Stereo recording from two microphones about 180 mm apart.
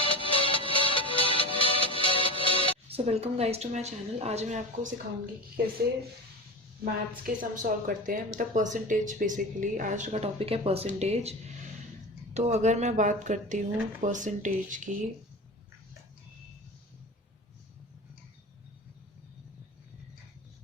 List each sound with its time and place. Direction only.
0.0 s music: 30° left (ahead or behind)
2.9 s a woman's voice: 35° right (ahead or behind)
7.3 s a woman's voice: 50° right (ahead or behind)